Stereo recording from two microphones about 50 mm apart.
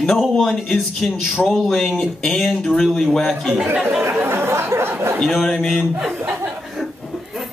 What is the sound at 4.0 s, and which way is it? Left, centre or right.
Chatter, right.